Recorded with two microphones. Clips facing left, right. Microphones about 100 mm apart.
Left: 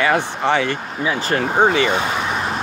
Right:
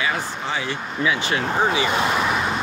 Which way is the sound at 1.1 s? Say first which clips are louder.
Left 6 dB; 45° left (ahead or behind).